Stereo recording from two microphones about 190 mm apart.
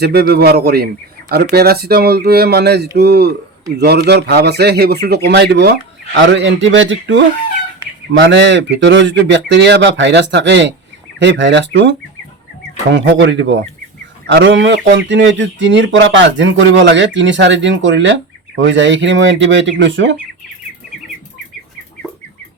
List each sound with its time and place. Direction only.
0.0 s speech: 55° right (ahead or behind)
6.1 s speech: 75° right (ahead or behind)